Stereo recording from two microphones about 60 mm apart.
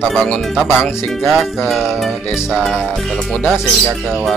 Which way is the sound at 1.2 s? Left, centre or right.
Centre.